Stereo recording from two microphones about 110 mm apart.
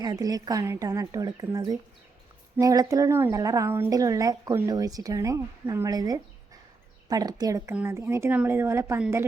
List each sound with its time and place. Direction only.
0.0 s speech: 35° right (ahead or behind)
3.7 s speech: 20° right (ahead or behind)
3.9 s speech: 30° right (ahead or behind)
7.7 s speech: 25° right (ahead or behind)